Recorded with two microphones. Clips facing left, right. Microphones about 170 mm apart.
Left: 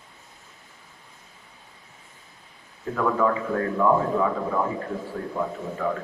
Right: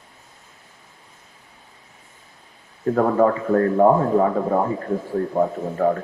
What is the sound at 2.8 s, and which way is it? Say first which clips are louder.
A man's voice: right 6 dB; 45° right (ahead or behind).